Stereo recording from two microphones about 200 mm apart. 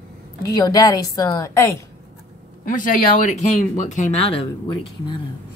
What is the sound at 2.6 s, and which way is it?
Speech, 40° left (ahead or behind).